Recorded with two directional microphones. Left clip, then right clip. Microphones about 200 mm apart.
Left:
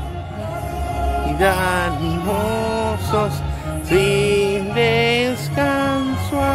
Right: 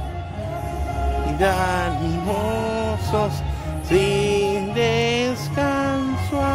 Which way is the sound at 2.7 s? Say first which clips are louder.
Left 3 dB; centre (ahead or behind).